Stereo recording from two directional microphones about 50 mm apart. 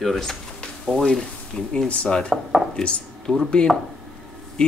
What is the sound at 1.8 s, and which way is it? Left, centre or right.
Speech, left.